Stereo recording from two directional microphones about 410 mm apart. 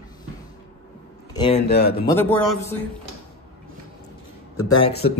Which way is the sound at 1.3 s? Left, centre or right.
Centre.